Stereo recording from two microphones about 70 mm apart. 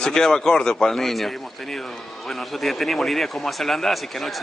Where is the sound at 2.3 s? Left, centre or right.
Centre.